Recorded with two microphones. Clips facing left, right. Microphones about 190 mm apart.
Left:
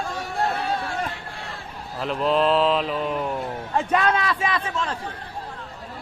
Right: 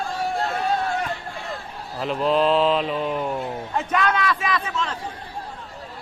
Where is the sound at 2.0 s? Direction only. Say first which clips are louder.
Right 1 dB; centre (ahead or behind).